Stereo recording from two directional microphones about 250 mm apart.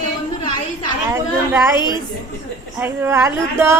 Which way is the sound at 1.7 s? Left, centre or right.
Centre.